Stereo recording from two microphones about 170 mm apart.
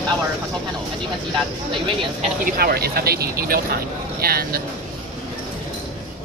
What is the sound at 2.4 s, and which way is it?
Speech, 65° right (ahead or behind).